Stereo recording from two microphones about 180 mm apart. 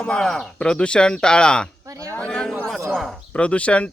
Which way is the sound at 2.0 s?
10° left (ahead or behind).